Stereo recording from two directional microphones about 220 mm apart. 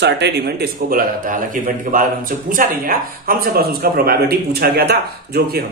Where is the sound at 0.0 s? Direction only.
50° right (ahead or behind).